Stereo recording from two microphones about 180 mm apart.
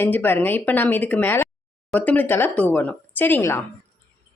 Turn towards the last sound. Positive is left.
turn(degrees=10)  # may be behind; listen again after turning